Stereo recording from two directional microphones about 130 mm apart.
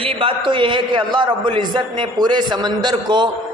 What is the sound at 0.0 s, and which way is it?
A man's voice, 45° right (ahead or behind).